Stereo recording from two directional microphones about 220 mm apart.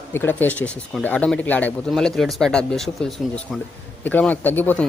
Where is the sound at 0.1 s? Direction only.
10° left (ahead or behind).